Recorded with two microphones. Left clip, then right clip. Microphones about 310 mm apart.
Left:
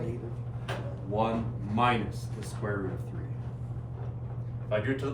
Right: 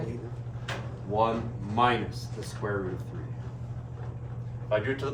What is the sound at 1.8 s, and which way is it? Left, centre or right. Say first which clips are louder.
Speech: right 2 dB; centre.